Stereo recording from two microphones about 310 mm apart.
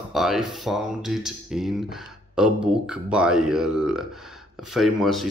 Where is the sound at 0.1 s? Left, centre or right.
Centre.